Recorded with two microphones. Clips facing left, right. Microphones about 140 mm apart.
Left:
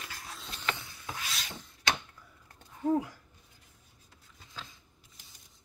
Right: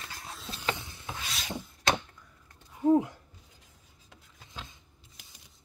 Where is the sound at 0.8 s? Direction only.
20° right (ahead or behind).